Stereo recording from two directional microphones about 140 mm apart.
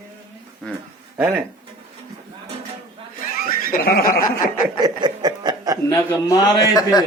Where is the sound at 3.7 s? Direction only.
90° left.